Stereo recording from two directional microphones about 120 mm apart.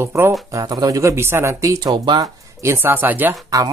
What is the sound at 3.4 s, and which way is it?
Speech, 30° right (ahead or behind).